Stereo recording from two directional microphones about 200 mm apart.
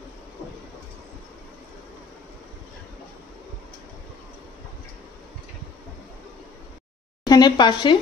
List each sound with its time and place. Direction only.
7.2 s a woman's voice: 20° left (ahead or behind)